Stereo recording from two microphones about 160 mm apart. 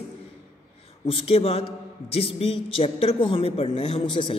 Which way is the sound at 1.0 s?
35° left (ahead or behind).